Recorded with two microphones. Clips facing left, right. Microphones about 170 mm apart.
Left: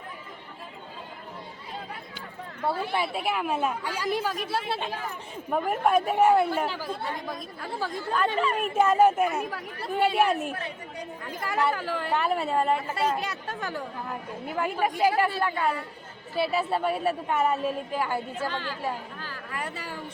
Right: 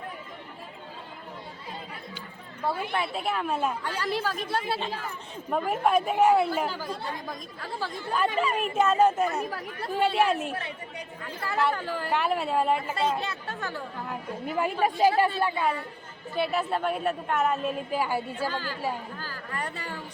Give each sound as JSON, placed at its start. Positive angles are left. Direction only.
{"t": 2.9, "sound": "a woman's voice", "side_deg": 5}
{"t": 7.6, "sound": "speech", "side_deg": 15}
{"t": 8.4, "sound": "a woman's voice", "side_deg": -5}
{"t": 8.7, "sound": "a woman's voice", "side_deg": 10}
{"t": 11.3, "sound": "a woman's voice", "side_deg": 10}
{"t": 12.9, "sound": "speech", "side_deg": 10}
{"t": 14.5, "sound": "a woman's voice", "side_deg": -20}
{"t": 15.4, "sound": "a woman's voice", "side_deg": -10}
{"t": 16.4, "sound": "a woman's voice", "side_deg": 5}
{"t": 17.9, "sound": "a woman's voice", "side_deg": -5}